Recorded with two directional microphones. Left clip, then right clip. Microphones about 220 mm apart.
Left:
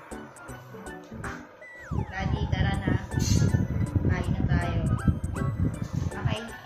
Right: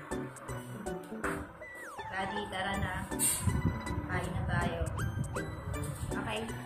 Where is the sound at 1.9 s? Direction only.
10° right (ahead or behind).